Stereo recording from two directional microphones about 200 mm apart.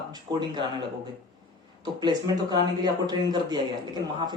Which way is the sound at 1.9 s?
20° right (ahead or behind).